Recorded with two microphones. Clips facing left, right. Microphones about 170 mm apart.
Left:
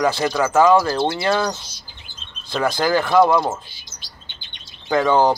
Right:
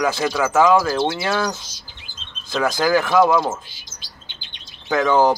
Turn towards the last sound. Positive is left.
turn(degrees=-5)  # may be behind; listen again after turning